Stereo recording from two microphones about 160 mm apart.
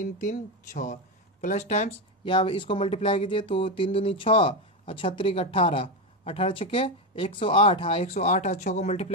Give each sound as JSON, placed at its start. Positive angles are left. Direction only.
{"t": 0.2, "sound": "speech", "side_deg": 50}
{"t": 2.2, "sound": "speech", "side_deg": 30}